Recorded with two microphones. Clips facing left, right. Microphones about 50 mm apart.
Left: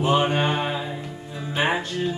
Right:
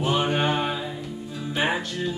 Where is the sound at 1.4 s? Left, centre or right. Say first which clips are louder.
Left 2 dB; left.